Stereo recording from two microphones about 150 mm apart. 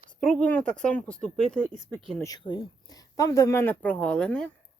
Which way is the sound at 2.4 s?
30° left (ahead or behind).